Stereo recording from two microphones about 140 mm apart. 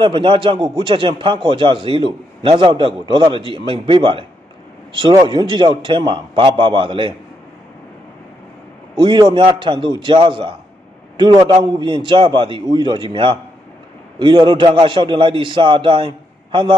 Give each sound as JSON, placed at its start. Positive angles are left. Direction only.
{"t": 0.0, "sound": "a man's voice", "side_deg": -35}
{"t": 8.9, "sound": "a man's voice", "side_deg": -30}